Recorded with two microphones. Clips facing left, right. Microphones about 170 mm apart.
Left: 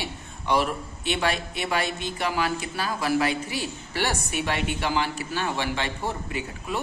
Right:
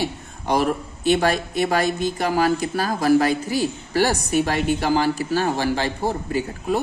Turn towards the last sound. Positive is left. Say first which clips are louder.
# right 8 dB
turn(degrees=-40)  # may be behind; listen again after turning